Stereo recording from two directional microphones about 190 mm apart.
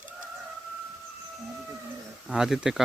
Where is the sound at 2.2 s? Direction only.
5° right (ahead or behind).